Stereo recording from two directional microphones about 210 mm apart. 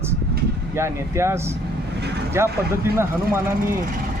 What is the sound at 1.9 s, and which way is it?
Vehicle, 50° right (ahead or behind).